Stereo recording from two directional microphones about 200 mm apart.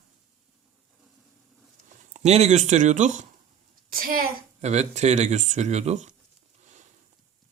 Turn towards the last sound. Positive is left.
turn(degrees=-35)  # may be behind; listen again after turning